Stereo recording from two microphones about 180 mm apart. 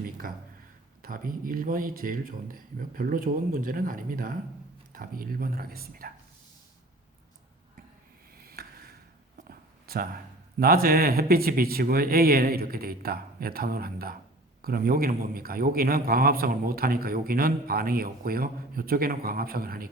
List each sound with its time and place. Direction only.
0.2 s a man's voice: 50° right (ahead or behind)
8.4 s a sound: 60° right (ahead or behind)
10.6 s a man's voice: 55° right (ahead or behind)